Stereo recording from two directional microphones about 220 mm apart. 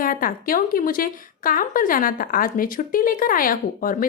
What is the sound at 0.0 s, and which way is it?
A woman's voice, 40° left (ahead or behind).